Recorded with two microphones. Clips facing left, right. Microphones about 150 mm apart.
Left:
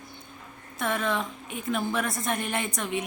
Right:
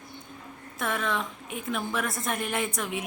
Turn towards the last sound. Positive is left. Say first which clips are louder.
# left 1 dB
turn(degrees=-5)  # may be behind; listen again after turning